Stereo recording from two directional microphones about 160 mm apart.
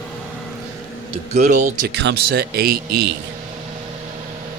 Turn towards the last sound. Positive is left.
turn(degrees=-85)